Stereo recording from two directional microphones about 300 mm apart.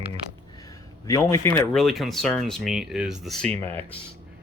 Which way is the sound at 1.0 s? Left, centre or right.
Centre.